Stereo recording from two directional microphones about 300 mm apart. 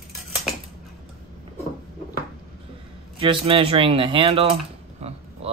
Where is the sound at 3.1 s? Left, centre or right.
Centre.